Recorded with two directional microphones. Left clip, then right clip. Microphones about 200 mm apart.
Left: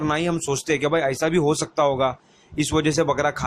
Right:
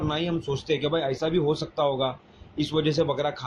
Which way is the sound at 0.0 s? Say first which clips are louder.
Left 5 dB; 45° left (ahead or behind).